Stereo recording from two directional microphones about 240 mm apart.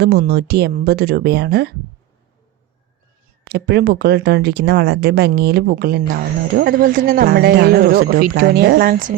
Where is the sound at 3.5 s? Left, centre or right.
Right.